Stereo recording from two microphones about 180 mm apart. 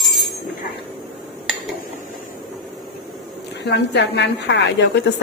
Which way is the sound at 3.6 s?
70° left (ahead or behind).